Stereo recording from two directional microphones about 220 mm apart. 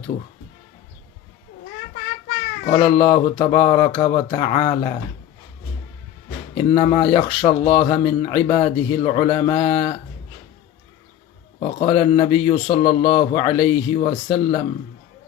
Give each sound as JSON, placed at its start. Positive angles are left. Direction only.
{"t": 2.7, "sound": "speech", "side_deg": 25}
{"t": 6.5, "sound": "speech", "side_deg": 25}
{"t": 11.8, "sound": "speech", "side_deg": 25}